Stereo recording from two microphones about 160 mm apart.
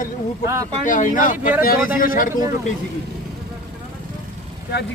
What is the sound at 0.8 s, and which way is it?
Speech, 50° left (ahead or behind).